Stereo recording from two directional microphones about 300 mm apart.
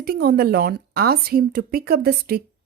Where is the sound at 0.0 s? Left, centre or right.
Right.